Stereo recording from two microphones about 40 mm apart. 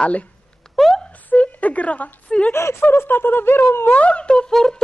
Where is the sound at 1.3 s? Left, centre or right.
Left.